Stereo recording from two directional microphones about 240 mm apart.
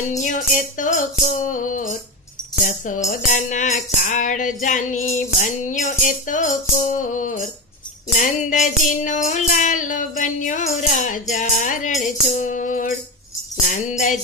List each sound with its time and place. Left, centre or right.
0.2 s music: left